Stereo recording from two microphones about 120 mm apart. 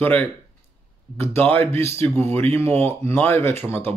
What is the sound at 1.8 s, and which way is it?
A man's voice, 20° left (ahead or behind).